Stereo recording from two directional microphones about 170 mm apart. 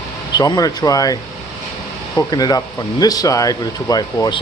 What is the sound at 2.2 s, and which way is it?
Speech, 25° left (ahead or behind).